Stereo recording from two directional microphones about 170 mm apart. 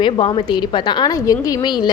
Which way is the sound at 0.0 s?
30° left (ahead or behind).